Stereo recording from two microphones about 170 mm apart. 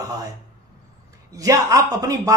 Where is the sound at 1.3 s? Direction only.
20° right (ahead or behind).